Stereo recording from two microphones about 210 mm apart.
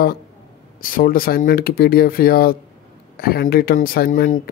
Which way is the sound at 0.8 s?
40° left (ahead or behind).